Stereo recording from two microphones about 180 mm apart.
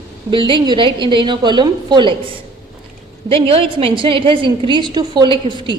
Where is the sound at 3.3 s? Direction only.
30° right (ahead or behind).